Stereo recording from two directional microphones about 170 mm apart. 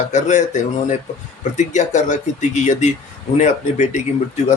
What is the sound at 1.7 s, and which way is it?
A man's voice, 45° left (ahead or behind).